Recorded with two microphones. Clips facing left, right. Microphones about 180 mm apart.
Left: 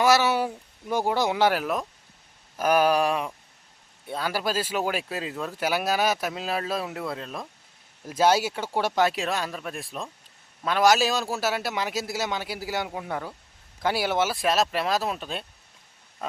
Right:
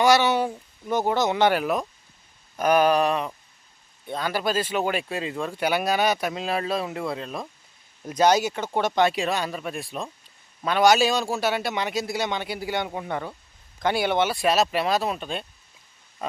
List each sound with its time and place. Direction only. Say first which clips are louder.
0.0 s speech: right 2 dB; 5° left (ahead or behind)
2.6 s a sound: right 2 dB; 5° left (ahead or behind)
4.0 s speech: right 2 dB; 5° left (ahead or behind)